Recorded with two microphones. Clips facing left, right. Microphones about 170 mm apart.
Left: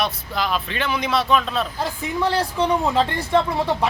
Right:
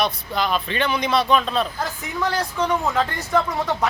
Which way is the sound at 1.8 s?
30° left (ahead or behind).